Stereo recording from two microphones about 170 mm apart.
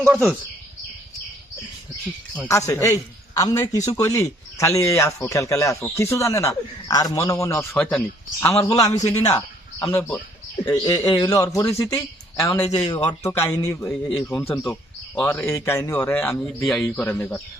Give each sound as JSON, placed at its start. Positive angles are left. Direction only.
{"t": 0.1, "sound": "speech", "side_deg": 5}
{"t": 2.5, "sound": "a man's voice", "side_deg": 20}